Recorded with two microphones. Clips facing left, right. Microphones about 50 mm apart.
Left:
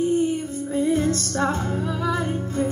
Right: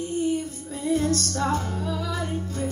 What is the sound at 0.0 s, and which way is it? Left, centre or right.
Music, left.